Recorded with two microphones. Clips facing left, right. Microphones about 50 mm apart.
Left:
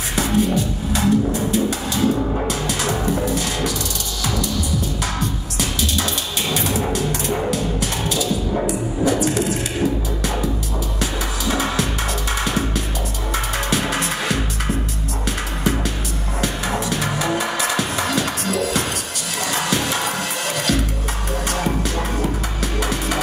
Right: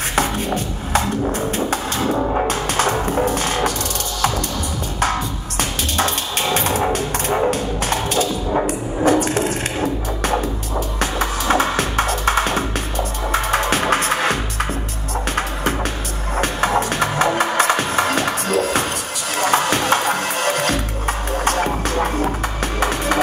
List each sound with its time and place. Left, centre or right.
0.1 s music: right
6.5 s music: right
11.0 s music: right
16.3 s music: right